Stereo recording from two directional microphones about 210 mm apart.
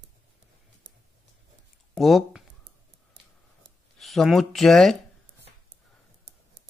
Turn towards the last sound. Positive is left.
turn(degrees=0)  # may be behind; listen again after turning